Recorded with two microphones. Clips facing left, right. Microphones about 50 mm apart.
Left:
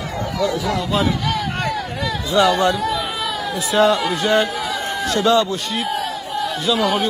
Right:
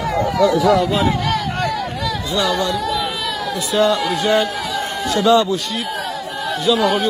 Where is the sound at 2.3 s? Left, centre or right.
Left.